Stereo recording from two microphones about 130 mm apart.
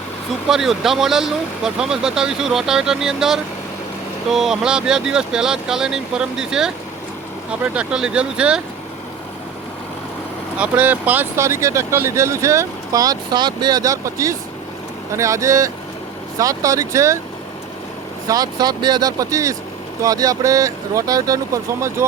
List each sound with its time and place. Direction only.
0.4 s speech: 5° right (ahead or behind)
10.6 s speech: 10° right (ahead or behind)
18.3 s speech: 30° right (ahead or behind)